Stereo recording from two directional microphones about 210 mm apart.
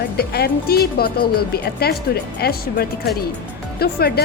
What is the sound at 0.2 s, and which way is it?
Speech, 50° left (ahead or behind).